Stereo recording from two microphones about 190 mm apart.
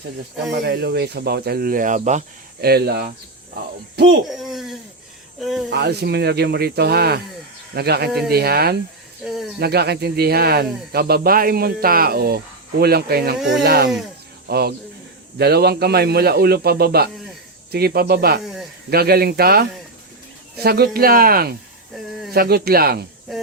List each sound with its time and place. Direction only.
0.5 s speech: 60° right (ahead or behind); by 2.2 s 40° right (ahead or behind)
2.6 s speech: 55° right (ahead or behind)
4.3 s a sound: centre (ahead or behind)
5.4 s speech: centre (ahead or behind)
5.7 s speech: 60° right (ahead or behind)
9.2 s speech: centre (ahead or behind)
9.6 s speech: 55° right (ahead or behind)
18.4 s snake: centre (ahead or behind)
18.9 s speech: 55° right (ahead or behind)